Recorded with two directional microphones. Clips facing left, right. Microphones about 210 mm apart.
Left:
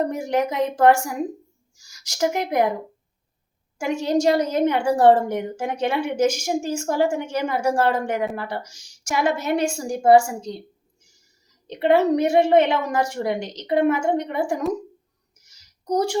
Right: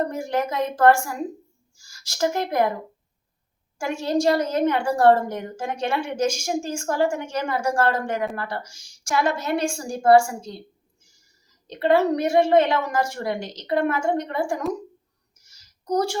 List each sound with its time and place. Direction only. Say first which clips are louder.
0.1 s speech: left 2 dB; 20° left (ahead or behind)
3.8 s a woman's voice: left 2 dB; 15° left (ahead or behind)
11.7 s a woman's voice: left 2 dB; 20° left (ahead or behind)
15.4 s a sound: left 1 dB; 20° left (ahead or behind)